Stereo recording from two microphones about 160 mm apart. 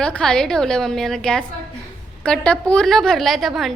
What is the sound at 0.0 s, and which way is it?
A woman's voice, 5° left (ahead or behind).